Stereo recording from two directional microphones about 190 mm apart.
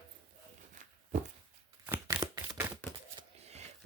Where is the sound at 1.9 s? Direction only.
15° right (ahead or behind).